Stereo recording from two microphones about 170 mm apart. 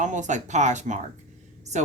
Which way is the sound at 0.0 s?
45° right (ahead or behind).